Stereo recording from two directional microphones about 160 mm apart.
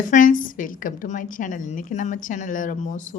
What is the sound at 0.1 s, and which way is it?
Speech, 55° left (ahead or behind).